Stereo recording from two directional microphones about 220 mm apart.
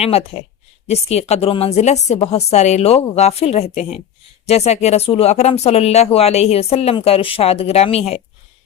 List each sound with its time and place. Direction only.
0.0 s speech: 25° left (ahead or behind)